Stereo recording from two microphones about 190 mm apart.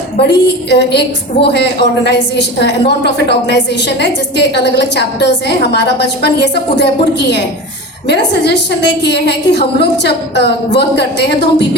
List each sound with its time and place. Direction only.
0.2 s a woman's voice: 60° left (ahead or behind)